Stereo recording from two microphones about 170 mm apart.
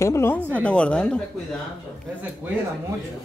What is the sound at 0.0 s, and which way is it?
Speech, 15° left (ahead or behind).